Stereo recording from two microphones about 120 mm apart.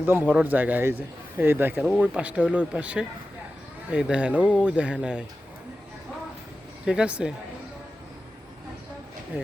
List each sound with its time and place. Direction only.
0.0 s a man's voice: 15° right (ahead or behind)
6.8 s a man's voice: 10° right (ahead or behind)